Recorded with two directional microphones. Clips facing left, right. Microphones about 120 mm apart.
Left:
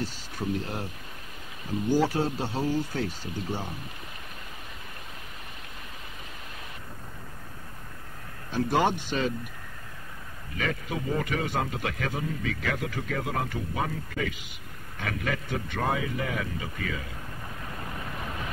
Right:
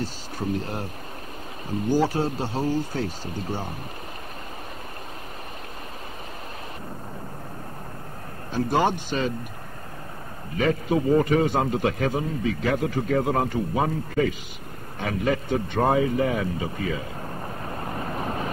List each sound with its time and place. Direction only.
2.1 s a man's voice: 35° right (ahead or behind)
8.7 s a man's voice: 35° right (ahead or behind)
10.6 s a man's voice: 30° right (ahead or behind)
17.3 s vehicle: 40° right (ahead or behind)